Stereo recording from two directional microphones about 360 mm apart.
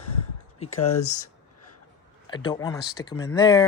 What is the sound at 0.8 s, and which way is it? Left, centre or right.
Speech, left.